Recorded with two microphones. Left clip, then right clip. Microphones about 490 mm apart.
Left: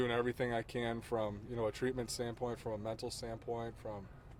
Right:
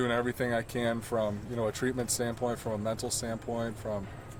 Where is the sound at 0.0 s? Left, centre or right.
Left.